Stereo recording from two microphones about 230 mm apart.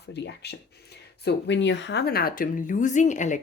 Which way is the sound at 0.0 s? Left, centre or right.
Left.